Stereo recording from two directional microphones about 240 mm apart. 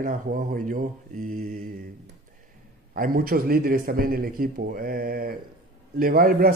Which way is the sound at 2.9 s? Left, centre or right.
Right.